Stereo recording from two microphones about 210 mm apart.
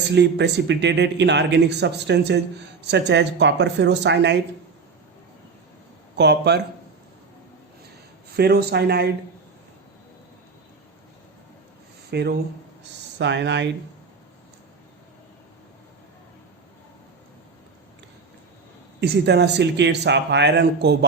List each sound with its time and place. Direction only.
0.1 s speech: 55° right (ahead or behind)
6.1 s speech: 55° right (ahead or behind)
8.4 s speech: 50° right (ahead or behind)
12.1 s speech: 50° right (ahead or behind)
18.9 s speech: 50° right (ahead or behind)